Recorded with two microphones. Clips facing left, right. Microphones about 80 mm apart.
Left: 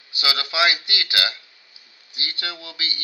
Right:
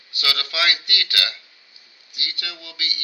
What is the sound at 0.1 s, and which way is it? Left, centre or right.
A man's voice, left.